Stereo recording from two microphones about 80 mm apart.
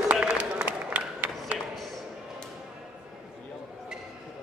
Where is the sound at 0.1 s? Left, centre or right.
Centre.